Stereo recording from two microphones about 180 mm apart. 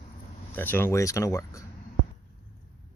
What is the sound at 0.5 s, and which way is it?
Speech, 10° left (ahead or behind).